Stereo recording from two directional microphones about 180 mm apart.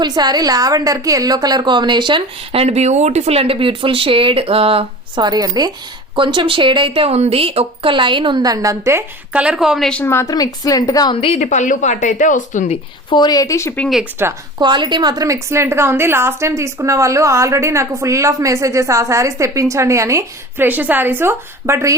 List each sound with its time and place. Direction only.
0.0 s a woman's voice: 25° right (ahead or behind); by 11.4 s 30° left (ahead or behind)
11.4 s speech: 45° left (ahead or behind)
13.1 s speech: 25° left (ahead or behind)
14.2 s a woman's voice: 10° right (ahead or behind)
14.6 s a woman's voice: 25° right (ahead or behind)